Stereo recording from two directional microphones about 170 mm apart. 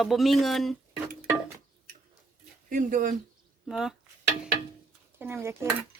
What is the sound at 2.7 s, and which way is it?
Speech, 50° right (ahead or behind).